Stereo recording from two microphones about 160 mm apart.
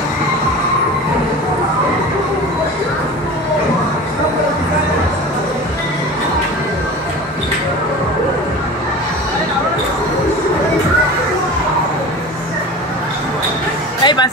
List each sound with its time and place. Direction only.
14.0 s music: 25° left (ahead or behind)